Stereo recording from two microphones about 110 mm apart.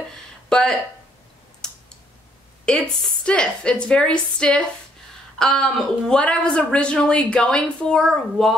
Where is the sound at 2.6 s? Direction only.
10° left (ahead or behind).